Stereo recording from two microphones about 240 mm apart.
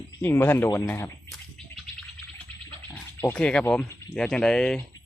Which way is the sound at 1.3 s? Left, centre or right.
Centre.